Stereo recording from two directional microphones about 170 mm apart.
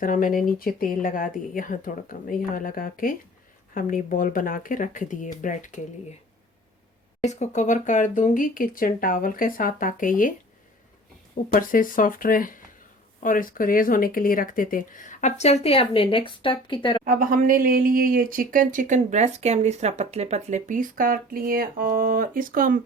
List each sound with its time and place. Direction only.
0.0 s speech: 55° left (ahead or behind)
7.2 s speech: 40° left (ahead or behind)
11.4 s speech: 55° left (ahead or behind); by 17.0 s 30° left (ahead or behind)
17.0 s speech: 55° right (ahead or behind)